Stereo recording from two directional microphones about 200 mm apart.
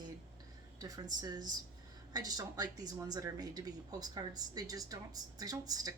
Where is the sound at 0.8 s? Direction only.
20° right (ahead or behind).